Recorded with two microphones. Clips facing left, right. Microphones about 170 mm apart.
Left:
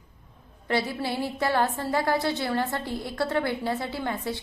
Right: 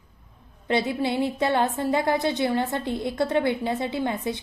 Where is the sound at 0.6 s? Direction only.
20° right (ahead or behind).